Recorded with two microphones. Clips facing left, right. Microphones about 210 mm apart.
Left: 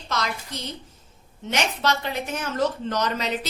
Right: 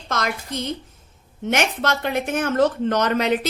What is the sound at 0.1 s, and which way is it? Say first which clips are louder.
A woman's voice: right 4 dB; 50° right (ahead or behind).